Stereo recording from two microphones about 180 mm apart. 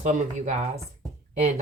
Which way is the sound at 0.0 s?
45° right (ahead or behind).